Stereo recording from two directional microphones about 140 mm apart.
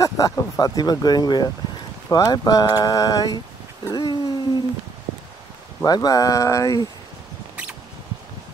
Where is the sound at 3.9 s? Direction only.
30° left (ahead or behind).